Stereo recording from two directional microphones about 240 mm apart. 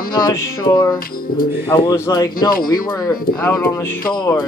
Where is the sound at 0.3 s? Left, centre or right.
Centre.